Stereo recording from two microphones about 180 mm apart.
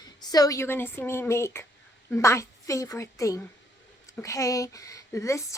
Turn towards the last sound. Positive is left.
turn(degrees=15)  # may be behind; listen again after turning